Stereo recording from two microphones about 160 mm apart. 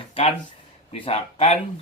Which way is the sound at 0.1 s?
40° left (ahead or behind).